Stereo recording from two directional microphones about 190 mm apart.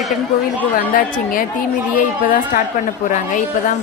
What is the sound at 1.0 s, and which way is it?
A woman's voice, 45° left (ahead or behind).